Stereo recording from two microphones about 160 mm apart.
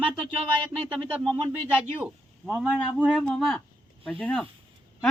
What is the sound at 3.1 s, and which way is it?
Speech, centre (ahead or behind).